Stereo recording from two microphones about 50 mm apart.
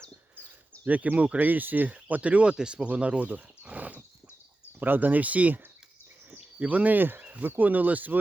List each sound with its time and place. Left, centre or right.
0.9 s speech: right